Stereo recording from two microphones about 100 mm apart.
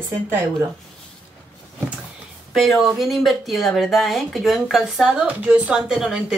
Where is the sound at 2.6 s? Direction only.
Centre (ahead or behind).